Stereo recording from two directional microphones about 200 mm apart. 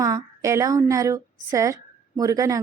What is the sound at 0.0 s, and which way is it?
A woman's voice, 15° right (ahead or behind).